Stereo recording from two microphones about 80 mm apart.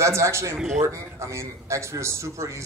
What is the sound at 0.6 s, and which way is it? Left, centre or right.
Speech, centre.